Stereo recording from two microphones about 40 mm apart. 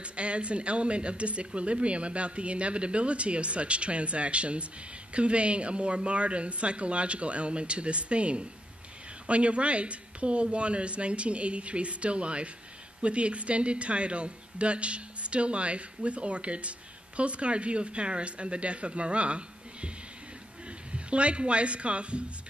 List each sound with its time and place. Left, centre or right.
0.0 s speech: right
20.9 s speech: right